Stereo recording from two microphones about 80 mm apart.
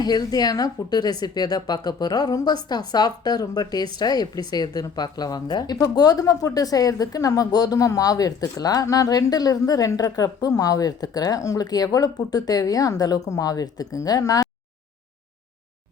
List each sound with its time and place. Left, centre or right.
0.0 s speech: left
5.7 s a woman's voice: left